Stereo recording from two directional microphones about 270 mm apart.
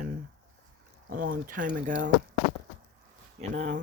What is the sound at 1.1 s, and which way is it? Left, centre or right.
Speech, right.